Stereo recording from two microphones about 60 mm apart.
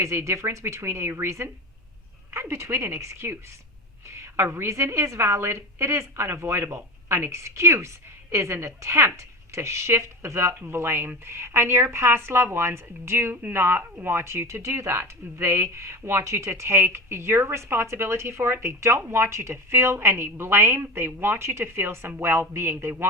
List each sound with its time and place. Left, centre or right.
0.0 s speech: right
7.3 s a woman's voice: right